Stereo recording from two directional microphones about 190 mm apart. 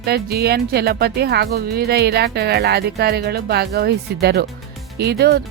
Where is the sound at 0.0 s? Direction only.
55° right (ahead or behind).